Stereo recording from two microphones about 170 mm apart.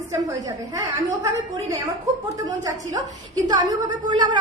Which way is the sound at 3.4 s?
25° right (ahead or behind).